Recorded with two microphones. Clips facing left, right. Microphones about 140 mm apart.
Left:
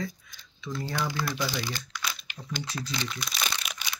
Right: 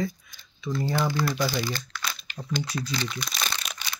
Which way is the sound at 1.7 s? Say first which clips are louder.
Right 2 dB; 15° left (ahead or behind).